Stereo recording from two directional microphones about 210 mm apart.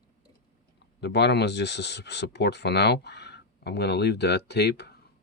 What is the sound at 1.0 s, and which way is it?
Speech, 55° left (ahead or behind).